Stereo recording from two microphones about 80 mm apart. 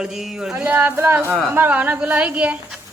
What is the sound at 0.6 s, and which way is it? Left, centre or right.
A woman's voice, right.